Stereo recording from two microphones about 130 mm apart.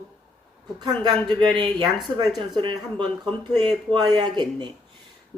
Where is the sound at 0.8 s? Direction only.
35° right (ahead or behind).